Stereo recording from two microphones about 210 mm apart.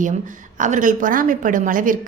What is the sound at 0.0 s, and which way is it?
A woman's voice, 40° right (ahead or behind).